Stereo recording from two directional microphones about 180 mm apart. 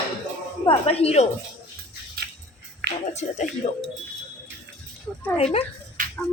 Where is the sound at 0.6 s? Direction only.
35° left (ahead or behind).